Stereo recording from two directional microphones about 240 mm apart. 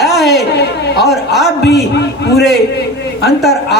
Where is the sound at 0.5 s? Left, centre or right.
Left.